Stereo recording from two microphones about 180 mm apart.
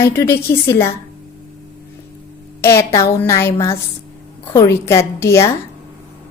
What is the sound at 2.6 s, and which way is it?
A woman's voice, 15° left (ahead or behind).